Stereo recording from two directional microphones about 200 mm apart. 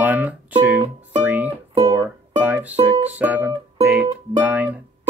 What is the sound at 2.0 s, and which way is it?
Music, 10° right (ahead or behind).